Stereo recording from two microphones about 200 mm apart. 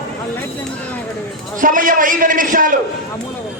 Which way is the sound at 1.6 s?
45° right (ahead or behind).